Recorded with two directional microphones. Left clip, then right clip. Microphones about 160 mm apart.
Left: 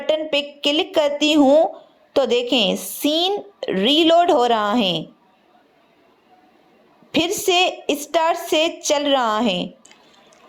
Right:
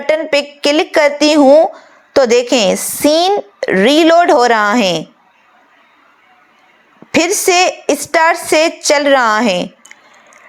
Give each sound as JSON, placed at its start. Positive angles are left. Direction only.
{"t": 0.0, "sound": "a woman's voice", "side_deg": -30}
{"t": 7.1, "sound": "a woman's voice", "side_deg": -35}